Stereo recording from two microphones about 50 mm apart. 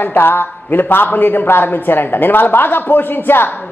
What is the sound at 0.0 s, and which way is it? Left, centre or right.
A man's voice, left.